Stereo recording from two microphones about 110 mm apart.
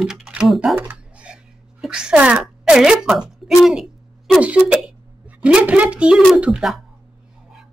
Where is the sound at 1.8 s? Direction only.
10° right (ahead or behind).